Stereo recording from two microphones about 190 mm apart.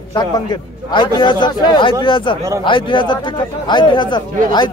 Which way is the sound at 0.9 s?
25° left (ahead or behind).